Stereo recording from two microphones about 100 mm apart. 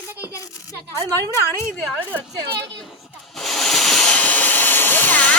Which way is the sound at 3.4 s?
Centre (ahead or behind).